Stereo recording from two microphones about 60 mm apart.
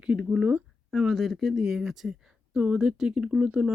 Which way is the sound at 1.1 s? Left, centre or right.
Centre.